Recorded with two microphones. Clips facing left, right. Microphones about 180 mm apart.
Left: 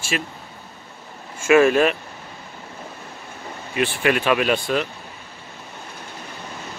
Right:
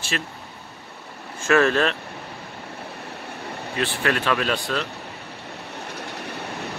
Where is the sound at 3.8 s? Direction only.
15° left (ahead or behind).